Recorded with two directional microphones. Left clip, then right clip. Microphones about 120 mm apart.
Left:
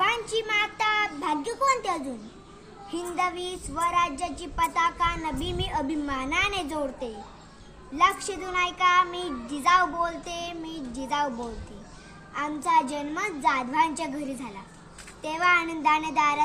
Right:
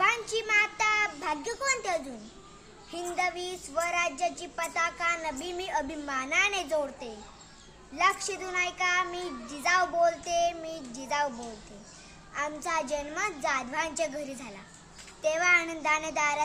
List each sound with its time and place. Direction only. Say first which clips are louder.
0.0 s a sound: left 2 dB; 25° right (ahead or behind)
2.9 s a child's voice: left 3 dB; 25° right (ahead or behind)
12.3 s a child's voice: left 7 dB; 25° right (ahead or behind)